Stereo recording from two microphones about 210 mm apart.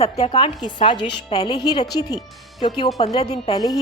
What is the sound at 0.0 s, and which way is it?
A woman's voice, 30° left (ahead or behind).